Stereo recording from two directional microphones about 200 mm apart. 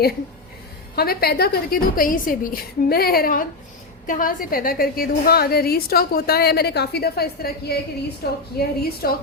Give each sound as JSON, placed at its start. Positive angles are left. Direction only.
{"t": 0.9, "sound": "a woman's voice", "side_deg": 50}